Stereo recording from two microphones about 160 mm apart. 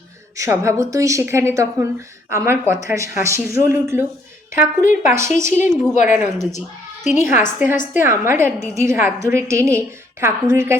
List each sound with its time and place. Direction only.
0.3 s a woman's voice: 20° right (ahead or behind)
7.0 s a woman's voice: 45° left (ahead or behind)
7.9 s a woman's voice: 15° right (ahead or behind)